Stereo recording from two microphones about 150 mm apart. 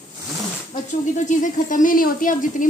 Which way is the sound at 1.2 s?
55° left (ahead or behind).